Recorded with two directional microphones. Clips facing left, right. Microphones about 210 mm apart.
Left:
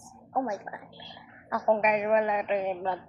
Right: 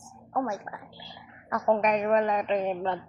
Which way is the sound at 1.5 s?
5° left (ahead or behind).